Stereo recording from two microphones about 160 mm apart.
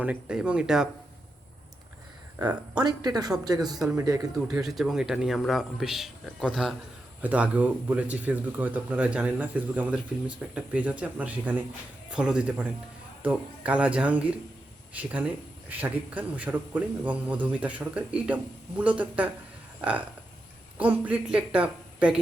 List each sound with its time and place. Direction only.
0.0 s a man's voice: 5° right (ahead or behind)
2.4 s speech: 10° right (ahead or behind)
2.8 s speech: 25° right (ahead or behind)
4.5 s a man's voice: centre (ahead or behind)